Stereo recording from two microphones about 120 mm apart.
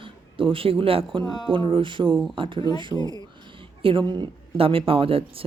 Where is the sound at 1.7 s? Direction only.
45° right (ahead or behind).